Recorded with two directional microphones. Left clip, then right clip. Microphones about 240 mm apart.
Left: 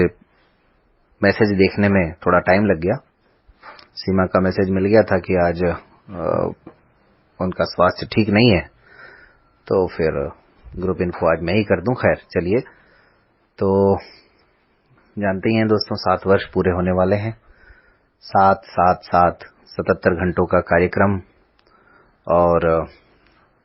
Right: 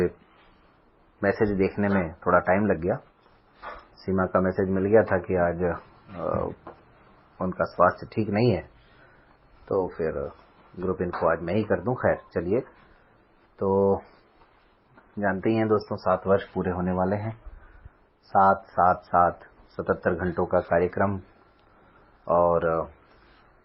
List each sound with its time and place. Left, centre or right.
1.2 s speech: left
4.0 s speech: left
7.3 s speech: left
9.6 s speech: left
15.4 s speech: left
18.3 s speech: left
22.2 s speech: left